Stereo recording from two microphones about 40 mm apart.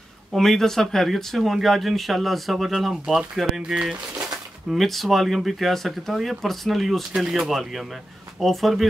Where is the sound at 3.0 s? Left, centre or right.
Centre.